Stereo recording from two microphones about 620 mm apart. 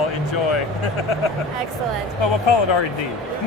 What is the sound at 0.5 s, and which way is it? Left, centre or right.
Speech, left.